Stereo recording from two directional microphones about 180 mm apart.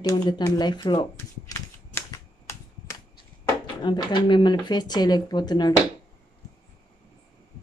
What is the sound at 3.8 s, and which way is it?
Speech, 25° left (ahead or behind).